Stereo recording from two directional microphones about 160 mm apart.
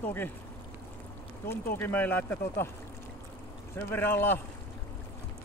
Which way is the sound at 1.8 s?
10° left (ahead or behind).